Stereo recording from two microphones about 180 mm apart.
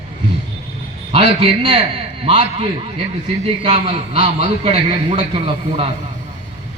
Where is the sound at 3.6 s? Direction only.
40° right (ahead or behind).